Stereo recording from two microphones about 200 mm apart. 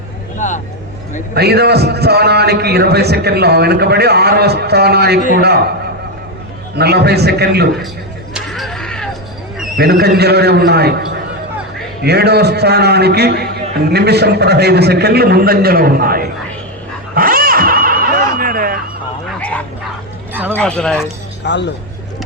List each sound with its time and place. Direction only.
0.3 s vehicle: 40° left (ahead or behind)
1.4 s a man's voice: 55° right (ahead or behind)
6.7 s a man's voice: 55° right (ahead or behind)
8.3 s a sound: centre (ahead or behind)
9.7 s a man's voice: 55° right (ahead or behind)
12.0 s a man's voice: 55° right (ahead or behind)
17.2 s a sound: 45° right (ahead or behind)
19.4 s bow-wow: 5° left (ahead or behind)
20.3 s a sound: 10° right (ahead or behind)
20.6 s speech: 5° left (ahead or behind)
21.4 s speech: 60° left (ahead or behind)